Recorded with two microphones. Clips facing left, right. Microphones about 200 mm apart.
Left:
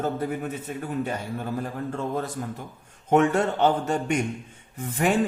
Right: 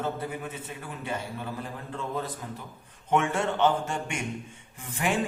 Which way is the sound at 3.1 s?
40° left (ahead or behind).